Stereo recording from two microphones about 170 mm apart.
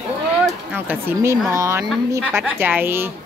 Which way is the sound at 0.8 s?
15° right (ahead or behind).